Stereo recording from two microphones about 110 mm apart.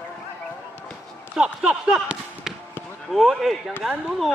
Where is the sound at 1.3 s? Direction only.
10° right (ahead or behind).